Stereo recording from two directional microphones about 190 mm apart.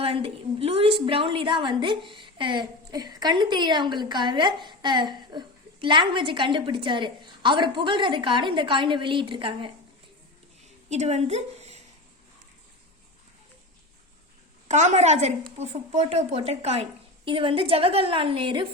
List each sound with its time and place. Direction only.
0.0 s a woman's voice: 30° right (ahead or behind)
10.8 s a woman's voice: 35° right (ahead or behind)
14.7 s a woman's voice: 40° right (ahead or behind)